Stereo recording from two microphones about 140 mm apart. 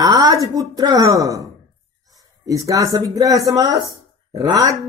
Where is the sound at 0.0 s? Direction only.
25° right (ahead or behind).